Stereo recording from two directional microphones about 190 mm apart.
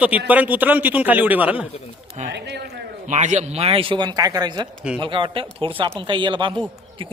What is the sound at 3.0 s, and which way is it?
A man's voice, 40° right (ahead or behind).